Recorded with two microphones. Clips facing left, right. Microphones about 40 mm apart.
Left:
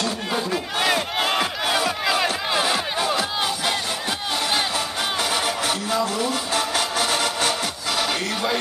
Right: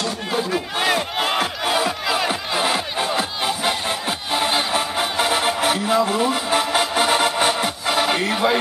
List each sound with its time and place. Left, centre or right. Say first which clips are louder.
0.0 s crowd: right 1 dB; centre
3.2 s crowd: right 1 dB; right
4.4 s music: right 4 dB; right